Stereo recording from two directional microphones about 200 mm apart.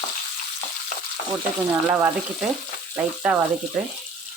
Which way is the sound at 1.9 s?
5° right (ahead or behind).